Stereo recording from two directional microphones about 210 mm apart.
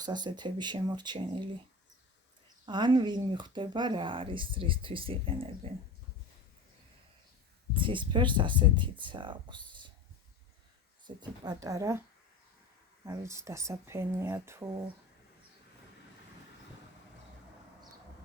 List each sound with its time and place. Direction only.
0.0 s speech: 20° right (ahead or behind)
2.6 s speech: 20° right (ahead or behind)
7.7 s speech: 25° right (ahead or behind)
11.0 s speech: 20° right (ahead or behind)
13.1 s speech: 15° right (ahead or behind)